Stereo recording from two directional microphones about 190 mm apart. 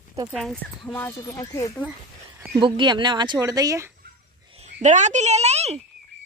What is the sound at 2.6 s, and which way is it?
Speech, 25° right (ahead or behind).